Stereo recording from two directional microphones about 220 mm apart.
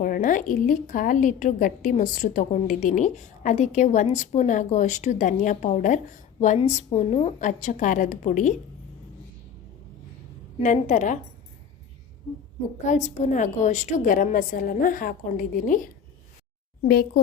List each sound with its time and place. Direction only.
0.0 s a woman's voice: 40° left (ahead or behind)
10.6 s a woman's voice: 35° left (ahead or behind)
12.8 s a woman's voice: 35° left (ahead or behind)